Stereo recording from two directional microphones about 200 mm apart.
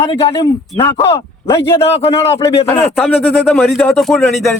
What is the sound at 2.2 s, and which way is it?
Speech, 15° left (ahead or behind).